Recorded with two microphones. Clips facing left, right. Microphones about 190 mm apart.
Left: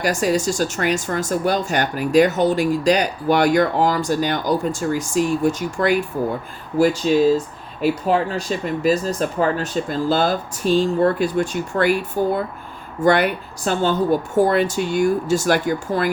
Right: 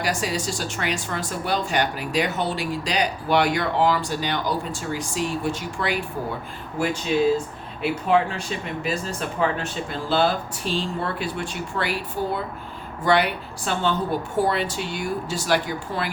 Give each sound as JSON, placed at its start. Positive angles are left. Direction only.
{"t": 0.0, "sound": "speech", "side_deg": 45}